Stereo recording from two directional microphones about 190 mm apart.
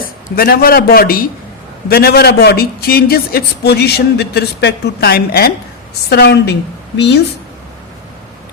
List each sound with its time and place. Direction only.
0.3 s a man's voice: 55° left (ahead or behind)